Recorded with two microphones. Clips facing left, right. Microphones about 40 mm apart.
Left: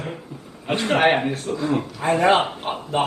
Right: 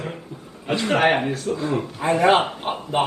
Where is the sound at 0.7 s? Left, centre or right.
Left.